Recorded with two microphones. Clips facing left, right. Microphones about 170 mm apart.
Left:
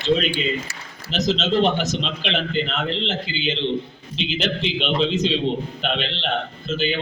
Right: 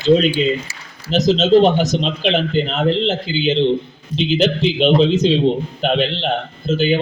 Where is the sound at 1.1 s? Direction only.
40° right (ahead or behind).